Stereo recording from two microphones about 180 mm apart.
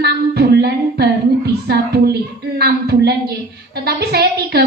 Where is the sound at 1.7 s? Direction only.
65° right (ahead or behind).